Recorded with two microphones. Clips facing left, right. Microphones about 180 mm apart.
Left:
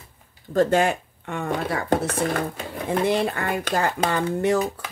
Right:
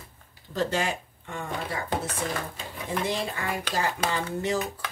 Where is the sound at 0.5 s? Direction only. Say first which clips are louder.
Left 8 dB; 50° left (ahead or behind).